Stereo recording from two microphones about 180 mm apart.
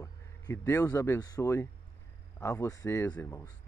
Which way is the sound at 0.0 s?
15° left (ahead or behind).